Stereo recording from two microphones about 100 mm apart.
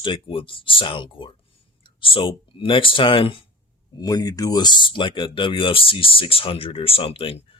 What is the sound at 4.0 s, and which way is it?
Speech, 40° left (ahead or behind).